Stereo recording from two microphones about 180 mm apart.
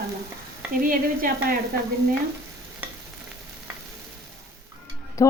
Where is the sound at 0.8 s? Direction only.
50° right (ahead or behind).